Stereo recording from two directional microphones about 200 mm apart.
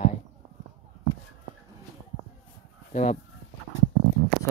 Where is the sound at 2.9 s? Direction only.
40° left (ahead or behind).